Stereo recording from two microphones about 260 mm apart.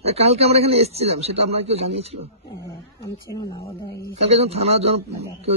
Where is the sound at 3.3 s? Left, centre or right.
Centre.